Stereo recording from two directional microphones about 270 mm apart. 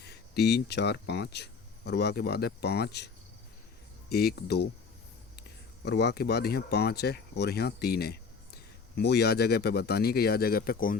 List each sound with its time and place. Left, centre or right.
0.0 s speech: left
4.1 s speech: left